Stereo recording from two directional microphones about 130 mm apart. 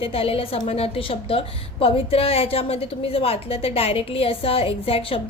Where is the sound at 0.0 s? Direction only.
45° left (ahead or behind).